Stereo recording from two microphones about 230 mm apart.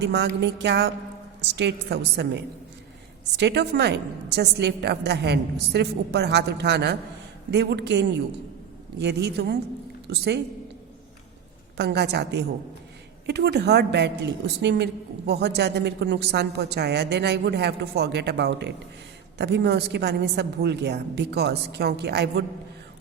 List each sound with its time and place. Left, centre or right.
0.0 s a woman's voice: right
11.8 s a woman's voice: right